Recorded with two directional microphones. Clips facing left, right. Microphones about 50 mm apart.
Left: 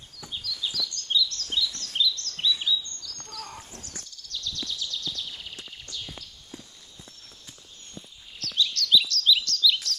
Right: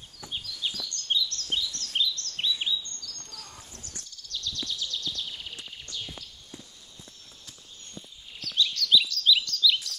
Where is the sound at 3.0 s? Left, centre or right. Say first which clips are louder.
Left 1 dB; right.